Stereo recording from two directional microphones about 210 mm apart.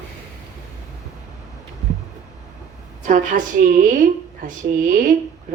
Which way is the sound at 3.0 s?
35° right (ahead or behind).